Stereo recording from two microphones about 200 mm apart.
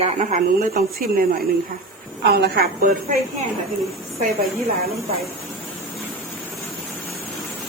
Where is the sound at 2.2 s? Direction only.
50° right (ahead or behind).